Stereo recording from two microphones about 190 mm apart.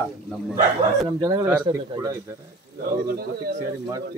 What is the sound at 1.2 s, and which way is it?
Speech, 20° right (ahead or behind).